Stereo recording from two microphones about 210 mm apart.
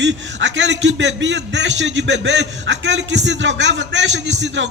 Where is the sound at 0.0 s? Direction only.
60° right (ahead or behind).